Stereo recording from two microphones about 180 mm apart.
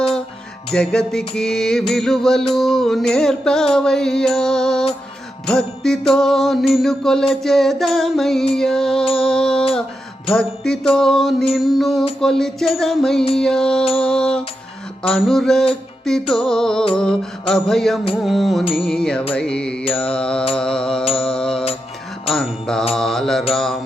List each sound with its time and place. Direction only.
0.7 s music: 5° left (ahead or behind)
18.6 s music: 30° left (ahead or behind)
18.9 s music: 5° left (ahead or behind)
21.2 s mantra: 5° left (ahead or behind)